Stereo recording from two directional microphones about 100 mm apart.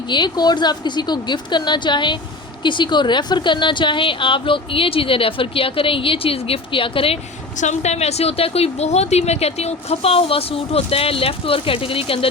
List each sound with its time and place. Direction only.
0.1 s a woman's voice: 45° left (ahead or behind); by 7.2 s 65° left (ahead or behind)
7.9 s speech: 90° left; by 12.3 s 65° left (ahead or behind)